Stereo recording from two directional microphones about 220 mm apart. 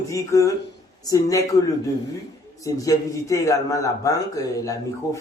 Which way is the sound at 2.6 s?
15° left (ahead or behind).